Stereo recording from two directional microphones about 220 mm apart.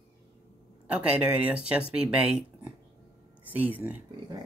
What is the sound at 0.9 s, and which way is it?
Speech, 5° right (ahead or behind).